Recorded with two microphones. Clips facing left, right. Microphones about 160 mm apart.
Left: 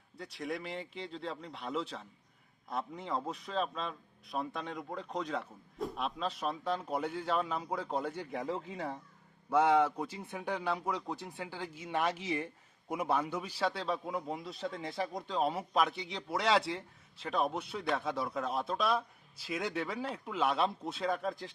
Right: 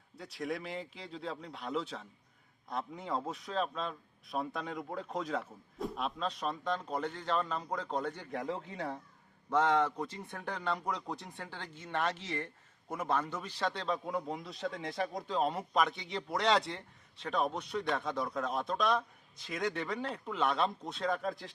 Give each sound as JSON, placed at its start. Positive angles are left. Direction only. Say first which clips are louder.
{"t": 0.2, "sound": "a man's voice", "louder": "right 1 dB", "side_deg": 0}